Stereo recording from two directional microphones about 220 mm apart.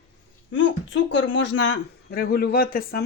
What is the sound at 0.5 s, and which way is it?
A man's voice, 60° left (ahead or behind).